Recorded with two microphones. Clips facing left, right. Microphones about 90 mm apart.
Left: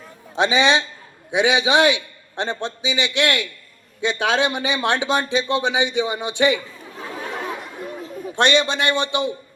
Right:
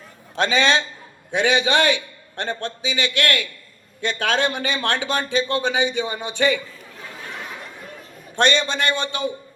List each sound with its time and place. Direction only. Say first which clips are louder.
0.3 s a man's voice: left 2 dB; 15° left (ahead or behind)
8.4 s speech: left 1 dB; 15° left (ahead or behind)